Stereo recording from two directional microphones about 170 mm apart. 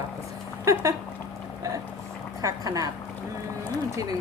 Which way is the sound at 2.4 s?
20° right (ahead or behind).